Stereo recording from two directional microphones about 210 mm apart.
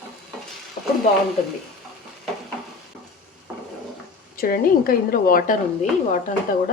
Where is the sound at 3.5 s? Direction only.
5° right (ahead or behind).